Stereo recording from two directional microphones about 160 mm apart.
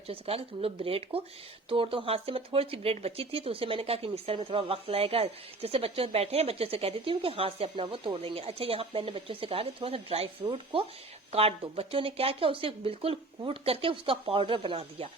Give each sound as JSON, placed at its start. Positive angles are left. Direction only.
{"t": 0.1, "sound": "speech", "side_deg": -35}